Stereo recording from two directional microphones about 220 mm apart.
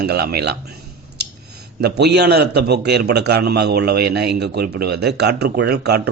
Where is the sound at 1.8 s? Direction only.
50° right (ahead or behind).